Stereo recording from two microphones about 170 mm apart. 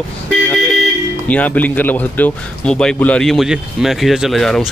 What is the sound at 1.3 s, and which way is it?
Speech, 10° left (ahead or behind).